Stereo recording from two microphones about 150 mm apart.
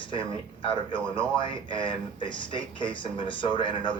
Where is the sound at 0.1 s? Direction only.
35° left (ahead or behind).